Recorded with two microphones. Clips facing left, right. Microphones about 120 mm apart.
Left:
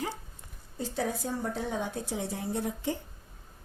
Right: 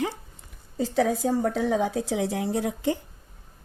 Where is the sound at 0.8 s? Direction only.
90° right.